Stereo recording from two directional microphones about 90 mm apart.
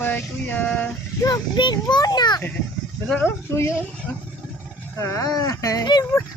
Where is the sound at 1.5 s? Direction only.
55° left (ahead or behind).